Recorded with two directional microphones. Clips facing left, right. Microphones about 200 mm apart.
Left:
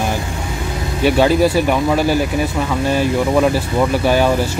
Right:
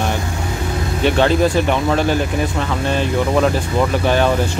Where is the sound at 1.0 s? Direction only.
10° left (ahead or behind).